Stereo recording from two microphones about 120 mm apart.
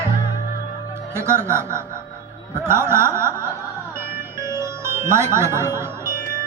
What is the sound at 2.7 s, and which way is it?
Chuckle, 20° right (ahead or behind).